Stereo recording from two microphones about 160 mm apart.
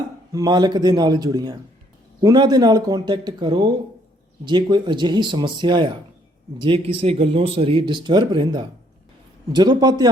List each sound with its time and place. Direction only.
0.3 s speech: 25° right (ahead or behind)